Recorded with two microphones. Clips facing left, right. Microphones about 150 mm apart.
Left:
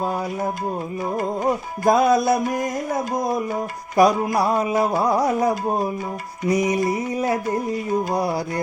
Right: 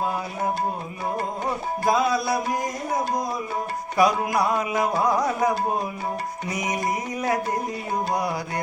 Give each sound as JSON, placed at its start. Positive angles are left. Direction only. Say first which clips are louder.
{"t": 1.8, "sound": "music", "louder": "left 6 dB", "side_deg": 45}
{"t": 3.9, "sound": "music", "louder": "left 4 dB", "side_deg": 35}